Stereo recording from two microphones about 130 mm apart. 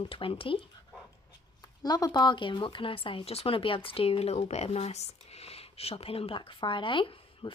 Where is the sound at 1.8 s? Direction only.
30° left (ahead or behind).